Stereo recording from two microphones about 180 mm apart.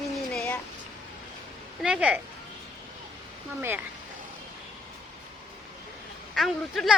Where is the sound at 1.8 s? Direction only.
5° right (ahead or behind).